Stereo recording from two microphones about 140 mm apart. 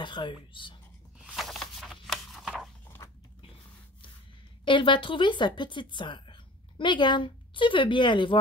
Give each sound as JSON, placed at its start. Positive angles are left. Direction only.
{"t": 0.0, "sound": "speech", "side_deg": 35}
{"t": 1.2, "sound": "a sound", "side_deg": 0}
{"t": 3.0, "sound": "biting", "side_deg": 25}
{"t": 4.6, "sound": "speech", "side_deg": 35}